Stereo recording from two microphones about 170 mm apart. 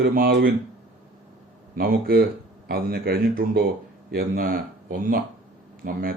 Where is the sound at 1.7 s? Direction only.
60° right (ahead or behind).